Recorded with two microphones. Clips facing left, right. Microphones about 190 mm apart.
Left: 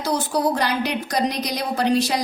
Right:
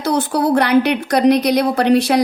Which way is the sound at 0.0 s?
60° right (ahead or behind).